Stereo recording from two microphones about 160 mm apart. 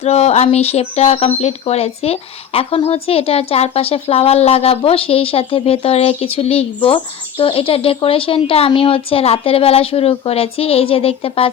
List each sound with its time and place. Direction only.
0.0 s speech: 40° left (ahead or behind)